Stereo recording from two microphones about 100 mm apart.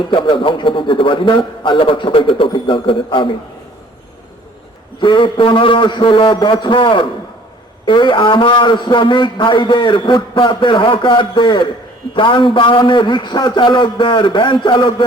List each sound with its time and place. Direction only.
0.1 s a man's voice: 60° left (ahead or behind)
4.9 s a man's voice: 55° left (ahead or behind)